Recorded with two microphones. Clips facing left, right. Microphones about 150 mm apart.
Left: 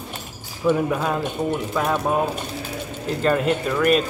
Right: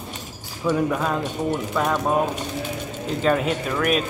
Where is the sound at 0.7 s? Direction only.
5° left (ahead or behind).